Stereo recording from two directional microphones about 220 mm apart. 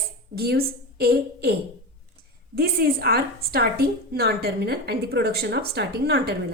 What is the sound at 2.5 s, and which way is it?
A woman's voice, 45° right (ahead or behind).